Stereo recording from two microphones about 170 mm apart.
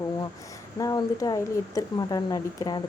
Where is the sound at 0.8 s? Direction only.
20° left (ahead or behind).